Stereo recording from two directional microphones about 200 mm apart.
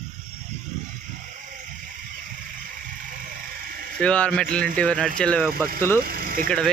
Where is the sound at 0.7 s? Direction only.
35° right (ahead or behind).